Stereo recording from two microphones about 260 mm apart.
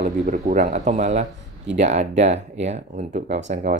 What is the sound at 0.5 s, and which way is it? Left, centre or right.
Speech, right.